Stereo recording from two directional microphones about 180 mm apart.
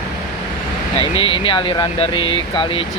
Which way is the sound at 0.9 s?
30° left (ahead or behind).